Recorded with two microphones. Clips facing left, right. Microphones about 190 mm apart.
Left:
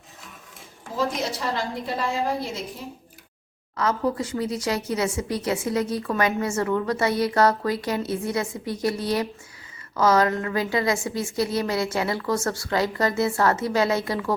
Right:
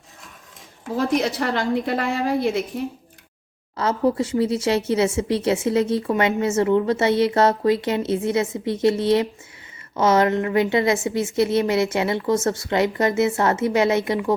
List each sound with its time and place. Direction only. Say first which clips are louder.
0.9 s a woman's voice: right 5 dB; 65° right (ahead or behind)
3.8 s speech: right 4 dB; 25° right (ahead or behind)